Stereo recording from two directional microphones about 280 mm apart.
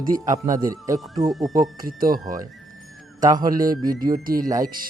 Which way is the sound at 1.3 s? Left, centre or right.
Centre.